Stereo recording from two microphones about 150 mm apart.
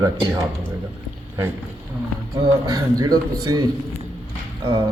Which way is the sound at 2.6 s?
25° right (ahead or behind).